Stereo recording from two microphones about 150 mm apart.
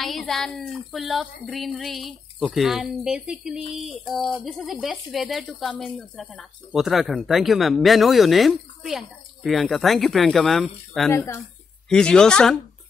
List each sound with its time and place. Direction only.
0.0 s speech: centre (ahead or behind)
11.1 s speech: 15° left (ahead or behind)
11.9 s speech: 5° left (ahead or behind)